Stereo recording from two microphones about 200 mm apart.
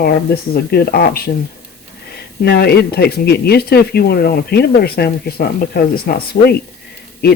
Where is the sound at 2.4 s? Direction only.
50° left (ahead or behind).